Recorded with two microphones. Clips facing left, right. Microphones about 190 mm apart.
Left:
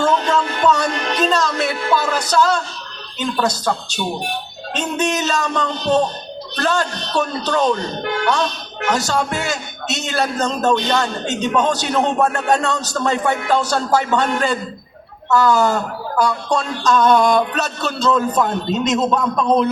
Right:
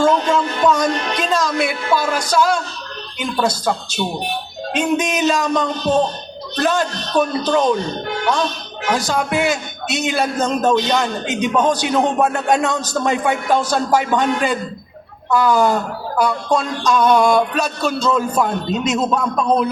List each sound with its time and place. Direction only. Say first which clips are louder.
0.0 s music: right 2 dB; 15° right (ahead or behind)
4.7 s speech: right 2 dB; 15° right (ahead or behind)
9.0 s speech: right 3 dB; 15° right (ahead or behind)